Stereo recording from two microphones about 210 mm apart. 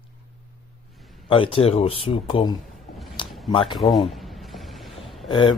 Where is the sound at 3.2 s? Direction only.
20° left (ahead or behind).